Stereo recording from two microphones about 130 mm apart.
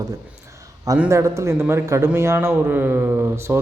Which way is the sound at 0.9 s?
30° right (ahead or behind).